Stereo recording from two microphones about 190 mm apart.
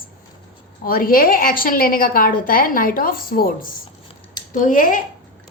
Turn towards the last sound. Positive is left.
turn(degrees=45)  # may be behind; listen again after turning